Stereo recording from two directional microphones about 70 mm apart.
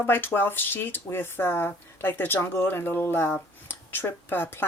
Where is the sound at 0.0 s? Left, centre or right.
Left.